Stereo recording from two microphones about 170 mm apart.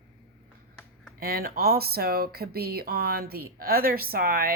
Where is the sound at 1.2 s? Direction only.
65° right (ahead or behind).